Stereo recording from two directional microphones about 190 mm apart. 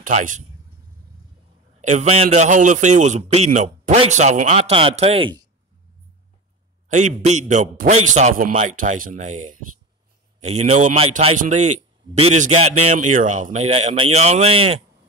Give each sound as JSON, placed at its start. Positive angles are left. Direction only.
{"t": 0.0, "sound": "a man's voice", "side_deg": -45}
{"t": 1.8, "sound": "a man's voice", "side_deg": -40}
{"t": 6.9, "sound": "a man's voice", "side_deg": -40}